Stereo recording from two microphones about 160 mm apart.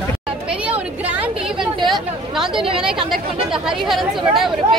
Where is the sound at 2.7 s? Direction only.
5° right (ahead or behind).